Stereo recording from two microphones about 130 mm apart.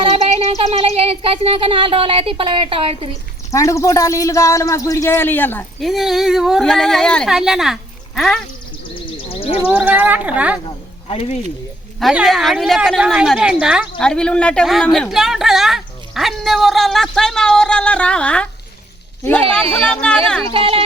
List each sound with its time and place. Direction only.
0.3 s a sound: 50° right (ahead or behind)
3.1 s speech: 25° left (ahead or behind)
5.8 s speech: centre (ahead or behind)
9.3 s a sound: 50° left (ahead or behind)
9.6 s speech: 10° right (ahead or behind)
11.1 s speech: 50° left (ahead or behind)
11.9 s speech: centre (ahead or behind)
14.0 s a man's voice: 5° left (ahead or behind)
19.9 s a man's voice: 10° left (ahead or behind)
20.5 s speech: 45° right (ahead or behind)